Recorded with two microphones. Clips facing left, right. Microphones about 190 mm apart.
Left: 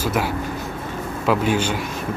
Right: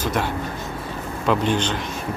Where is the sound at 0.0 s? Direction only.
10° left (ahead or behind).